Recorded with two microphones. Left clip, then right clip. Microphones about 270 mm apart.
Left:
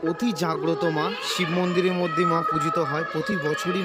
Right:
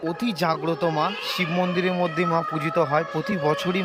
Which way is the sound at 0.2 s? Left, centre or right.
Centre.